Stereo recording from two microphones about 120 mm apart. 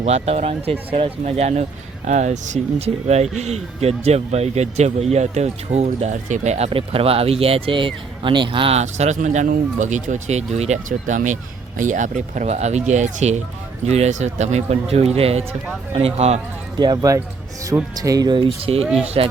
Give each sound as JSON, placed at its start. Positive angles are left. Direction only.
{"t": 0.0, "sound": "speech", "side_deg": -65}
{"t": 2.0, "sound": "speech", "side_deg": -80}
{"t": 13.8, "sound": "speech", "side_deg": -65}
{"t": 16.7, "sound": "speech", "side_deg": -35}